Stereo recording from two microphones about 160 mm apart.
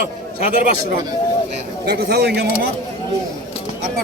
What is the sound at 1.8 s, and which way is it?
Speech, 85° right.